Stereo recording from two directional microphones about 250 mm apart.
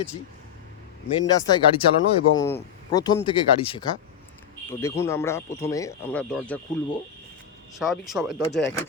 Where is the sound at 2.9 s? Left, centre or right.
Centre.